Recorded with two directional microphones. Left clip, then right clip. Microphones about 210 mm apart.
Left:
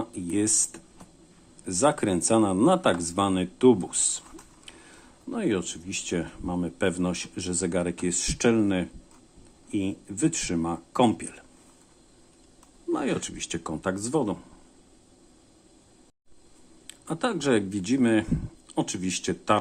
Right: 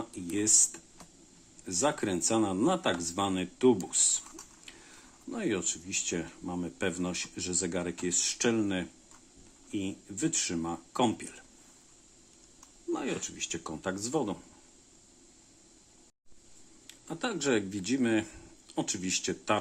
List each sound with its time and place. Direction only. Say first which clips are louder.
0.0 s a sound: left 5 dB; 15° left (ahead or behind)
1.6 s speech: left 7 dB; 15° left (ahead or behind)
4.7 s a sound: left 5 dB; 10° left (ahead or behind)
5.3 s speech: left 5 dB; 10° left (ahead or behind)
12.9 s speech: left 6 dB; 20° left (ahead or behind)
16.8 s speech: left 7 dB; 15° left (ahead or behind)